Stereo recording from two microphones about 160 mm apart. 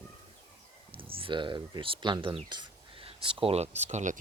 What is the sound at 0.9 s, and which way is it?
Speech, 35° right (ahead or behind).